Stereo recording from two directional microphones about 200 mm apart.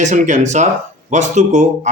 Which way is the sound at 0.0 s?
40° right (ahead or behind).